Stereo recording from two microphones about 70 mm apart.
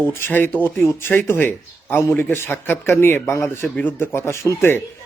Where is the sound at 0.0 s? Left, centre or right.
Left.